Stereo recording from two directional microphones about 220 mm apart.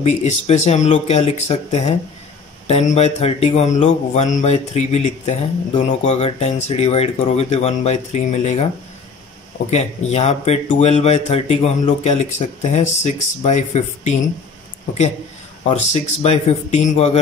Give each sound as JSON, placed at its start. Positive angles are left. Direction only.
{"t": 0.0, "sound": "speech", "side_deg": 30}
{"t": 9.7, "sound": "speech", "side_deg": 30}
{"t": 15.6, "sound": "speech", "side_deg": 30}